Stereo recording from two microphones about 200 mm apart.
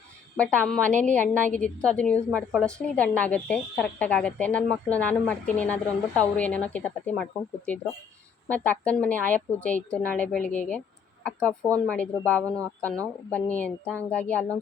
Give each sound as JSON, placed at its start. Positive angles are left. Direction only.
{"t": 0.3, "sound": "a woman's voice", "side_deg": 5}
{"t": 12.5, "sound": "speech", "side_deg": -15}
{"t": 12.8, "sound": "a woman's voice", "side_deg": 5}